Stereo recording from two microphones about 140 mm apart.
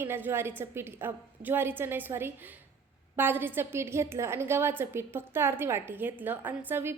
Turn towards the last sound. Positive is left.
turn(degrees=-15)  # may be behind; listen again after turning